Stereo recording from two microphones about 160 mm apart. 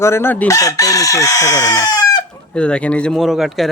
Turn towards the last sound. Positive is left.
turn(degrees=0)  # may be behind; listen again after turning